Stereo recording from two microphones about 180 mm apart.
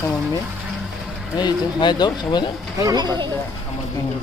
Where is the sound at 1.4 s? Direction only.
25° left (ahead or behind).